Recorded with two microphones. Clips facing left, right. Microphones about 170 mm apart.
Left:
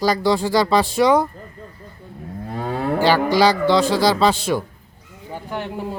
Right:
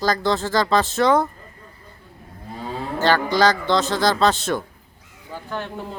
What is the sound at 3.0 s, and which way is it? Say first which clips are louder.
A man's voice: left 2 dB; 10° left (ahead or behind).